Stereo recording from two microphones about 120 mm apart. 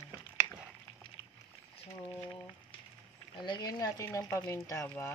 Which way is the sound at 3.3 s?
40° left (ahead or behind).